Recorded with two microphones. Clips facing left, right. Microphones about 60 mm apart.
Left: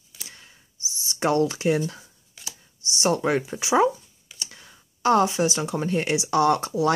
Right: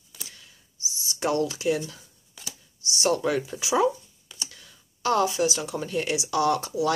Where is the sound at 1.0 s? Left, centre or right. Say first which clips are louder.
Left 4 dB; left.